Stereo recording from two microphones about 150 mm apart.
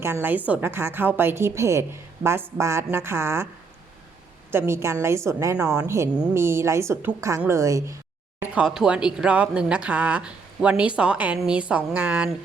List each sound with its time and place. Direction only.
0.0 s speech: 15° right (ahead or behind)
4.5 s a woman's voice: 20° right (ahead or behind)
8.4 s speech: 5° right (ahead or behind)